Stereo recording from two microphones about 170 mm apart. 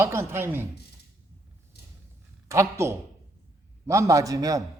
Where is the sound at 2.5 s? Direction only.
15° right (ahead or behind).